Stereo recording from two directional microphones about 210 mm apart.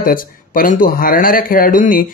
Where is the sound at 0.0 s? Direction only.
40° left (ahead or behind).